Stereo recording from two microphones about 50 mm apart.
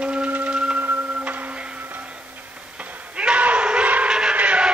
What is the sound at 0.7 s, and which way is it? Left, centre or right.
Printer, right.